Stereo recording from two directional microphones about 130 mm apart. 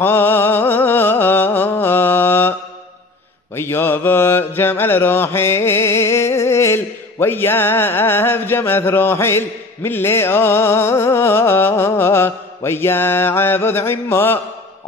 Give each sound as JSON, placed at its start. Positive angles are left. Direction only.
{"t": 0.0, "sound": "music", "side_deg": 15}
{"t": 3.5, "sound": "mantra", "side_deg": 20}